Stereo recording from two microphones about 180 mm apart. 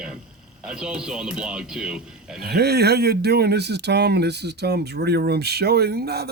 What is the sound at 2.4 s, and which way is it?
Speech, 65° right (ahead or behind).